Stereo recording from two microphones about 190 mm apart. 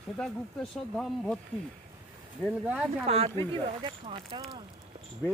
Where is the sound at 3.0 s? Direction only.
30° right (ahead or behind).